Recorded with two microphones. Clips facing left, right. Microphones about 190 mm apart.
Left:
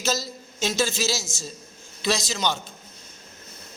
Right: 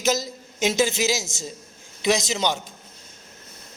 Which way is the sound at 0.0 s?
15° right (ahead or behind).